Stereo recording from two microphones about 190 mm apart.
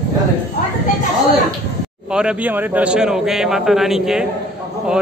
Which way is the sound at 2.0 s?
5° right (ahead or behind).